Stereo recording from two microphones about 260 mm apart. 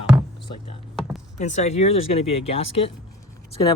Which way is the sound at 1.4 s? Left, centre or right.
Left.